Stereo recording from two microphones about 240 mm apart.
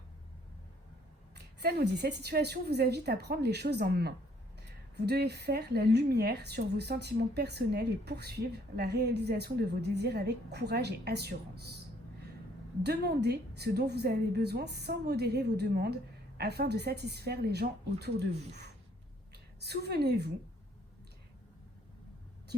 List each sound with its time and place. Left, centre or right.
1.6 s a woman's voice: right
12.8 s a woman's voice: right
19.5 s a woman's voice: right